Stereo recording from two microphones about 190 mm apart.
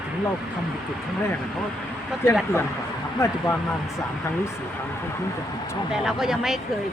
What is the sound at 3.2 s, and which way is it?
Speech, 15° left (ahead or behind).